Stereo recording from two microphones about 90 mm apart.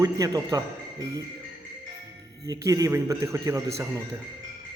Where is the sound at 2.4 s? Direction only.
40° right (ahead or behind).